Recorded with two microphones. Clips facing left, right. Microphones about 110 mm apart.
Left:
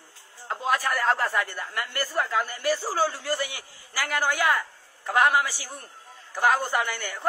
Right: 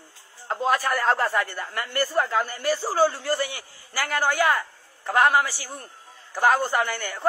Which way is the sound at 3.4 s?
10° left (ahead or behind).